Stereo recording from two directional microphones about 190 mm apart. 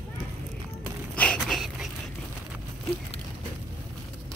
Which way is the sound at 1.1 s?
5° left (ahead or behind).